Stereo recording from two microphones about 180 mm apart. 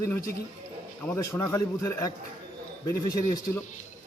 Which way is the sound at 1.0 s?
15° left (ahead or behind).